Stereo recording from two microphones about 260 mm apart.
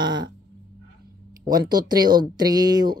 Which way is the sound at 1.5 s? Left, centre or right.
Centre.